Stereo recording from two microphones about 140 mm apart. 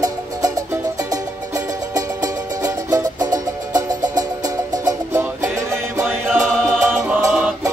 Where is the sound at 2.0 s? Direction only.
25° right (ahead or behind).